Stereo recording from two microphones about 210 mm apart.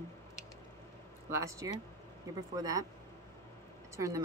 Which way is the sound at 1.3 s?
15° right (ahead or behind).